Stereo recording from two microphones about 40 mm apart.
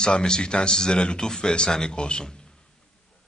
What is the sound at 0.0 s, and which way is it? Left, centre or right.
A man's voice, left.